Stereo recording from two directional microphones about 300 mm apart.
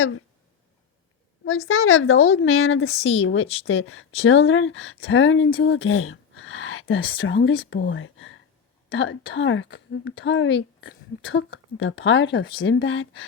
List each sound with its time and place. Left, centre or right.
1.5 s a woman's voice: left
3.4 s speech: centre
3.7 s a woman's voice: left
5.5 s a sound: left
7.3 s a woman's voice: left